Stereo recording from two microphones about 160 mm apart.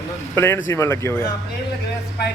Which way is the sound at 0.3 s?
15° left (ahead or behind).